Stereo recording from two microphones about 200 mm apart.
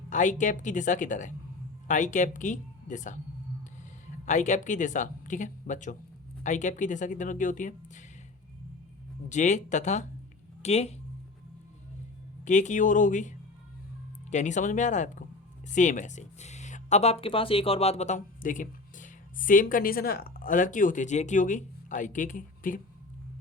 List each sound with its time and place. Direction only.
0.1 s speech: 40° left (ahead or behind)
4.3 s speech: 35° left (ahead or behind)
9.3 s speech: 35° left (ahead or behind)
12.5 s speech: 35° left (ahead or behind)